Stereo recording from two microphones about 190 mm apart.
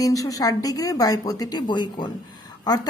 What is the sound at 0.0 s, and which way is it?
A woman's voice, 20° left (ahead or behind).